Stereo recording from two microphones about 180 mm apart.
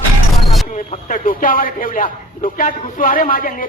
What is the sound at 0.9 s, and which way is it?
A man's voice, 45° left (ahead or behind).